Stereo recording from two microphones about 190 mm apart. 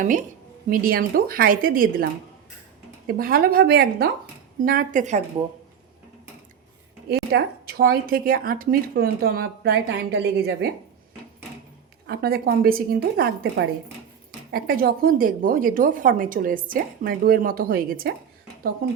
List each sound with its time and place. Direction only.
0.0 s a woman's voice: 40° right (ahead or behind)
3.1 s a woman's voice: 50° right (ahead or behind)
7.1 s speech: 55° right (ahead or behind)
12.0 s a woman's voice: 55° right (ahead or behind)